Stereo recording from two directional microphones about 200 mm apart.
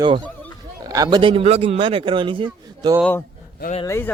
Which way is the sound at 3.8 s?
15° left (ahead or behind).